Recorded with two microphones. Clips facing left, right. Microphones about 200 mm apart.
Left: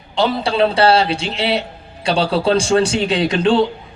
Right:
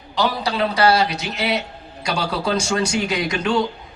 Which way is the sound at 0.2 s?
25° left (ahead or behind).